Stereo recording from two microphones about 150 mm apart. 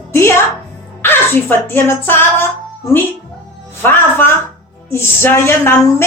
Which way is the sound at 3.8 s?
15° left (ahead or behind).